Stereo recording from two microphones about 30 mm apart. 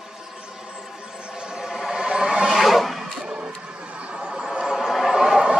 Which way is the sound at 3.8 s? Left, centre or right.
Right.